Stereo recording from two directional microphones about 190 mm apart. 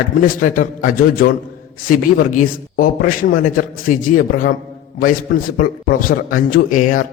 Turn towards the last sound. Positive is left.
turn(degrees=45)  # may be behind; listen again after turning